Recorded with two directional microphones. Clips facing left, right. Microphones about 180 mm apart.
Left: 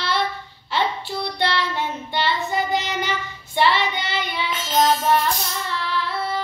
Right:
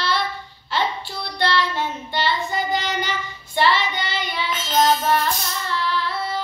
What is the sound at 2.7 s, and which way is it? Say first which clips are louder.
Child singing: even; 60° left (ahead or behind).